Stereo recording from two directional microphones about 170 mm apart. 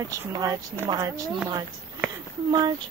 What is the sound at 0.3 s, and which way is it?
Speech, 20° right (ahead or behind).